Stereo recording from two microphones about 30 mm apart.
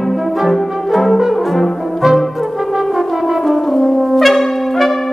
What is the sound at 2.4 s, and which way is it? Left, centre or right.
French horn, centre.